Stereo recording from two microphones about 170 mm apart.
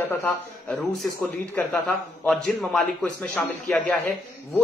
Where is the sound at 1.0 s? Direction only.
10° left (ahead or behind).